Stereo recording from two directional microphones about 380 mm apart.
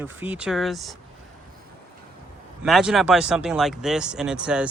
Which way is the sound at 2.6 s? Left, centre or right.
Centre.